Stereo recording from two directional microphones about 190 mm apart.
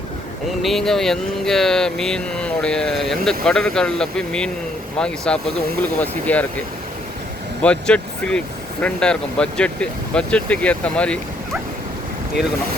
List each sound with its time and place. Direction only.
0.6 s vehicle: centre (ahead or behind)
6.0 s speech: 10° left (ahead or behind)
7.6 s speech: 5° left (ahead or behind)
8.8 s vehicle: 5° left (ahead or behind)